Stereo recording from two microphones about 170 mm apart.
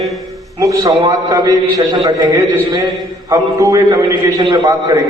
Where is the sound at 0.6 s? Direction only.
20° right (ahead or behind).